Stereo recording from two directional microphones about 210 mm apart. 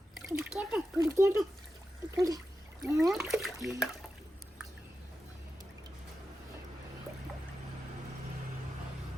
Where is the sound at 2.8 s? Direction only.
15° right (ahead or behind).